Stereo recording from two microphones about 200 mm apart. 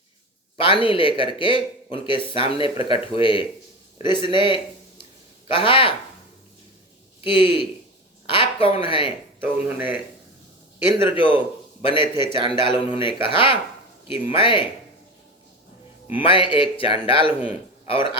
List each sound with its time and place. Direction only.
0.5 s speech: 25° left (ahead or behind)
7.3 s speech: 25° left (ahead or behind)
9.4 s speech: 10° right (ahead or behind)
11.1 s a man's voice: 25° left (ahead or behind)
16.0 s speech: 25° left (ahead or behind)